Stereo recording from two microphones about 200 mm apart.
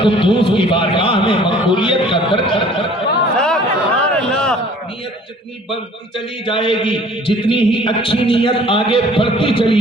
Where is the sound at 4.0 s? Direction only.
5° left (ahead or behind).